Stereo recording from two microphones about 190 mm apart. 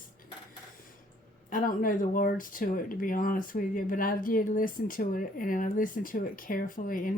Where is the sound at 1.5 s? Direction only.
45° left (ahead or behind).